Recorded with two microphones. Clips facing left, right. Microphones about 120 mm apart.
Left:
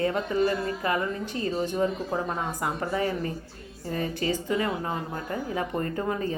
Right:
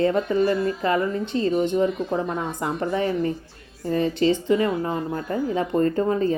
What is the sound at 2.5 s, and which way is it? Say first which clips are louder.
A woman's voice: right 4 dB; 25° right (ahead or behind).